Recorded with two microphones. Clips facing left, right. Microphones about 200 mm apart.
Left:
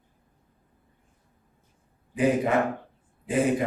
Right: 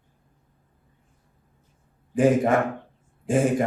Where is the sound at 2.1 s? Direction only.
45° right (ahead or behind).